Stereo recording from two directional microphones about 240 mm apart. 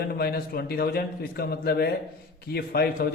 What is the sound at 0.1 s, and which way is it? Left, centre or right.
A man's voice, left.